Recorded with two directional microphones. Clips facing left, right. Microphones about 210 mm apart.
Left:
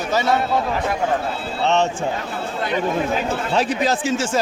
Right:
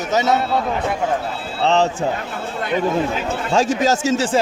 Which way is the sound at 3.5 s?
45° right (ahead or behind).